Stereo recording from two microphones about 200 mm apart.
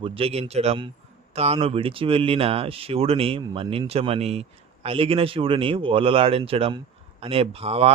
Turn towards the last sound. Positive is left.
turn(degrees=-30)  # may be behind; listen again after turning